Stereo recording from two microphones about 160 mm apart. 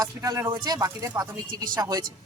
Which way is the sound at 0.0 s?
20° right (ahead or behind).